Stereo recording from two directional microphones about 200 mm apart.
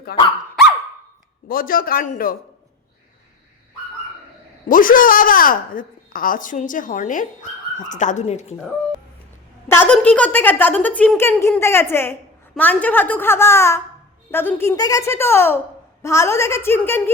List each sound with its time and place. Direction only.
0.1 s a woman's voice: 50° left (ahead or behind)
1.5 s a woman's voice: 45° left (ahead or behind)
4.7 s a woman's voice: 45° left (ahead or behind)
9.6 s a woman's voice: 10° left (ahead or behind)